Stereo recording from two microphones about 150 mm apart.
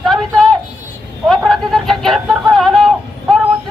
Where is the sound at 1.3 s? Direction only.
5° left (ahead or behind).